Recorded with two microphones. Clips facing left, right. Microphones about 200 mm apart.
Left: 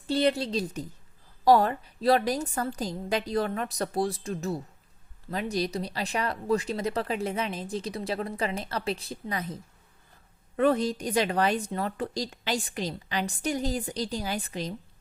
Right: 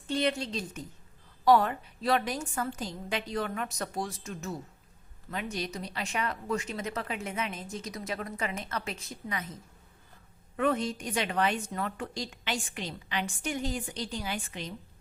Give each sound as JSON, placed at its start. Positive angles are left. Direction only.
{"t": 0.1, "sound": "speech", "side_deg": 35}
{"t": 10.6, "sound": "speech", "side_deg": 35}